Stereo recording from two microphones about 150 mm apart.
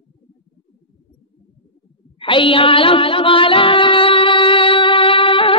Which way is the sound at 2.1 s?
35° left (ahead or behind).